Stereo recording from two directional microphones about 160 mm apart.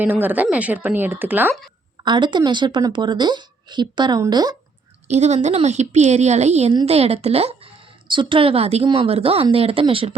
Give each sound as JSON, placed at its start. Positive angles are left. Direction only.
{"t": 0.0, "sound": "speech", "side_deg": -10}
{"t": 2.0, "sound": "a woman's voice", "side_deg": -30}
{"t": 5.0, "sound": "a woman's voice", "side_deg": -45}